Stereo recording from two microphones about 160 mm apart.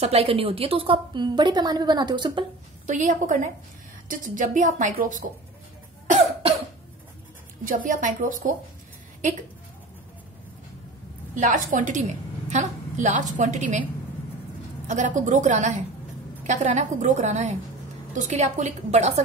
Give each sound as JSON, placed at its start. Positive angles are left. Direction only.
{"t": 0.0, "sound": "a woman's voice", "side_deg": -40}
{"t": 2.9, "sound": "a woman's voice", "side_deg": -50}
{"t": 7.6, "sound": "a woman's voice", "side_deg": -55}
{"t": 11.3, "sound": "a woman's voice", "side_deg": -50}
{"t": 14.9, "sound": "a woman's voice", "side_deg": -50}